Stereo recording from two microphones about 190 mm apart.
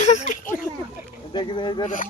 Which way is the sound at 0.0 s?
40° left (ahead or behind).